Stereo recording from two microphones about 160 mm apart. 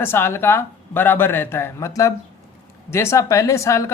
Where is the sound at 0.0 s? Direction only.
15° left (ahead or behind).